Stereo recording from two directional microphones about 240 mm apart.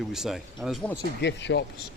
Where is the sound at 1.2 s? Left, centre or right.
Left.